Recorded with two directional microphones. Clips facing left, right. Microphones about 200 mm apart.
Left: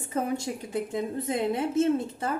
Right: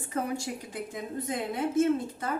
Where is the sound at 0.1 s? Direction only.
20° left (ahead or behind).